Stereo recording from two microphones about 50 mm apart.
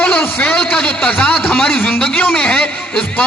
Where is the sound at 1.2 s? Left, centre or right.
Left.